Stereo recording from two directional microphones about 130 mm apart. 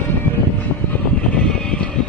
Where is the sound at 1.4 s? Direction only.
5° left (ahead or behind).